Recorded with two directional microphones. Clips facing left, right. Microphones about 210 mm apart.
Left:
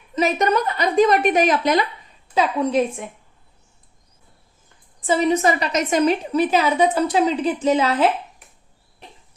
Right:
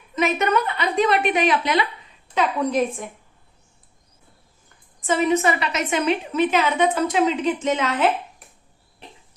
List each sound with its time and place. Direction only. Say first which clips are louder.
0.2 s a woman's voice: left 2 dB; 35° left (ahead or behind)
2.3 s a woman's voice: left 2 dB; 25° left (ahead or behind)
4.9 s a woman's voice: left 1 dB; 35° left (ahead or behind)